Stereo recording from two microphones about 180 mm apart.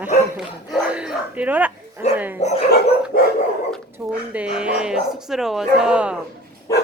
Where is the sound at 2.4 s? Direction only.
40° left (ahead or behind).